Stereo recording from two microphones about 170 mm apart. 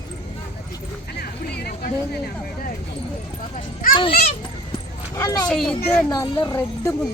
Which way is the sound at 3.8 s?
55° left (ahead or behind).